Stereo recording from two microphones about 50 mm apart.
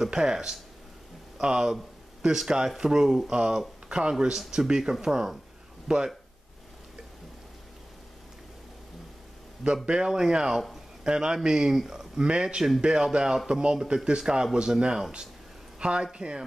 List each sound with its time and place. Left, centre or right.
0.0 s speech: centre
9.8 s speech: centre